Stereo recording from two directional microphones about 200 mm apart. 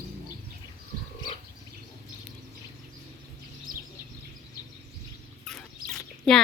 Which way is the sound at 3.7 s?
45° right (ahead or behind).